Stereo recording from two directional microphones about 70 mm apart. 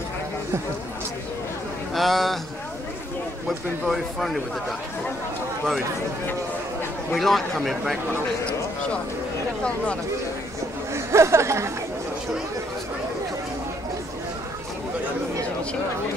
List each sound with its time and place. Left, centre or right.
2.0 s a man's voice: centre
3.4 s a man's voice: centre
7.2 s a man's voice: centre
10.9 s chatter: right